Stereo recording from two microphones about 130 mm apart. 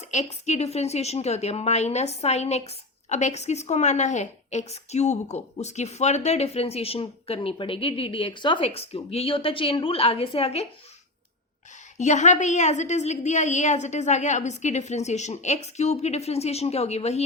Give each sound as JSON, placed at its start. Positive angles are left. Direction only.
{"t": 0.1, "sound": "a woman's voice", "side_deg": 60}
{"t": 11.9, "sound": "a woman's voice", "side_deg": 65}